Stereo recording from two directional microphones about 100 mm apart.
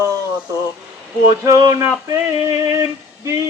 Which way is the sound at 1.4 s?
35° right (ahead or behind).